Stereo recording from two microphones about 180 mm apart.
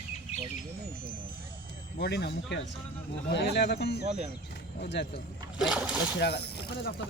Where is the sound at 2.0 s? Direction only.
70° left (ahead or behind).